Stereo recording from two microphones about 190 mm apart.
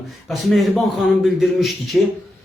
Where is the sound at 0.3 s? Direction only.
Centre (ahead or behind).